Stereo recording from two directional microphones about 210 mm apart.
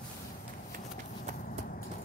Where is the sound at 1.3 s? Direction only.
40° left (ahead or behind).